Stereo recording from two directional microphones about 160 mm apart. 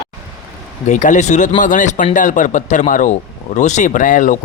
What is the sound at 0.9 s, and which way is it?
A man's voice, 50° left (ahead or behind).